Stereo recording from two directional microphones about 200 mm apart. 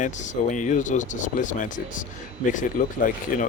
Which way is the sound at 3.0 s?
40° left (ahead or behind).